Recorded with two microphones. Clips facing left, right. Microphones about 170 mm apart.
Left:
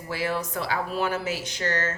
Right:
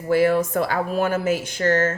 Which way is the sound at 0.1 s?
50° right (ahead or behind).